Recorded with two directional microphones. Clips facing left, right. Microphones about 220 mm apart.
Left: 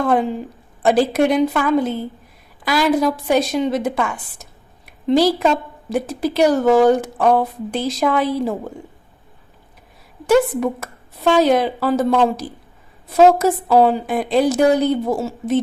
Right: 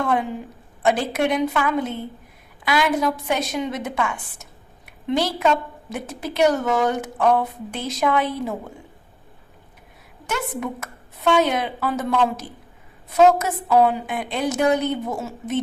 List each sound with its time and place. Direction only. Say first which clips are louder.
0.0 s a woman's voice: left 5 dB; 35° left (ahead or behind)
10.2 s speech: left 12 dB; 35° left (ahead or behind)